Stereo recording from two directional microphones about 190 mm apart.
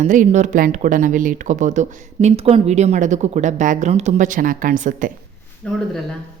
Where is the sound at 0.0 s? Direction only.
40° right (ahead or behind).